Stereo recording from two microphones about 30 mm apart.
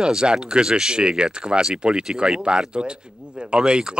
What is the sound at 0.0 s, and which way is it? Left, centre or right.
Speech, right.